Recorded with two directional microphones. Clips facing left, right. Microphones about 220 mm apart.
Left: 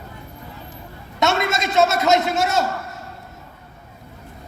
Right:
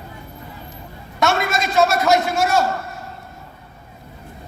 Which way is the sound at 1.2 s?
20° left (ahead or behind).